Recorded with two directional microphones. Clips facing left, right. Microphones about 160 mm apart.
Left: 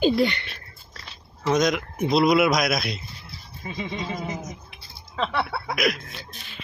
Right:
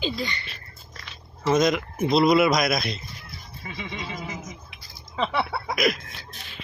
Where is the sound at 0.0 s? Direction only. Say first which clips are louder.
Left 9 dB; 65° left (ahead or behind).